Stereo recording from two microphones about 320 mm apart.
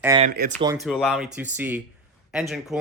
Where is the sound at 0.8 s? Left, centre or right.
Centre.